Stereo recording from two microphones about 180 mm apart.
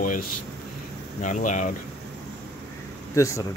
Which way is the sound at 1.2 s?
45° left (ahead or behind).